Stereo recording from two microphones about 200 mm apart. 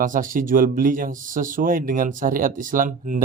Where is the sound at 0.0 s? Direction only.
40° right (ahead or behind).